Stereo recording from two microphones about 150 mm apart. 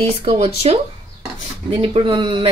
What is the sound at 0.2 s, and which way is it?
Speech, 45° right (ahead or behind).